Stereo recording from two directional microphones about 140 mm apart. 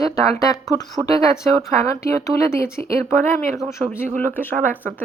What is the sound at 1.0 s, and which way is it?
A woman's voice, 20° left (ahead or behind).